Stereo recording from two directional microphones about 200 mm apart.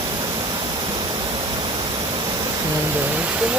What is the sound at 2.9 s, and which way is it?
Pink noise, 10° right (ahead or behind).